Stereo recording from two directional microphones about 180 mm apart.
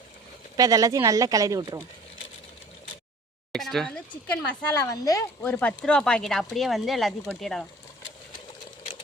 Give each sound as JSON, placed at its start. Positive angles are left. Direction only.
{"t": 0.5, "sound": "speech", "side_deg": -20}
{"t": 3.5, "sound": "a sound", "side_deg": 0}
{"t": 4.7, "sound": "speech", "side_deg": 20}
{"t": 5.4, "sound": "speech", "side_deg": 10}